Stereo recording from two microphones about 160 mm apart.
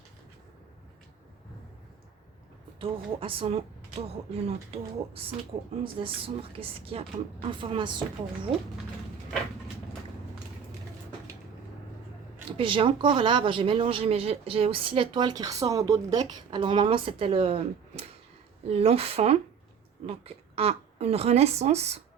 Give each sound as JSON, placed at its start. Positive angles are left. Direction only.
{"t": 2.7, "sound": "speech", "side_deg": -35}
{"t": 12.5, "sound": "speech", "side_deg": -30}